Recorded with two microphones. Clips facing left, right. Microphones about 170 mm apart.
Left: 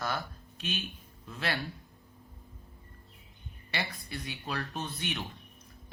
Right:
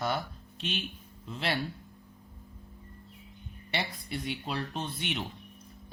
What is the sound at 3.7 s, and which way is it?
Speech, 25° right (ahead or behind).